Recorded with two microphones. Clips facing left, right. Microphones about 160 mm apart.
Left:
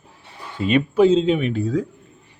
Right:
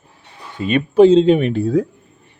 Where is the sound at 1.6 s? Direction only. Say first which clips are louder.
Right 5 dB; 30° right (ahead or behind).